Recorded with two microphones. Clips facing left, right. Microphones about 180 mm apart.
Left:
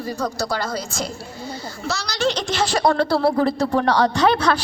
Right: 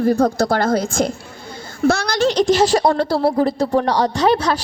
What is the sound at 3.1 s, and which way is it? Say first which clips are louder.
Speech: right 1 dB; 15° right (ahead or behind).